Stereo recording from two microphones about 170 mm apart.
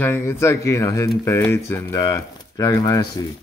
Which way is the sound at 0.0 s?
15° left (ahead or behind).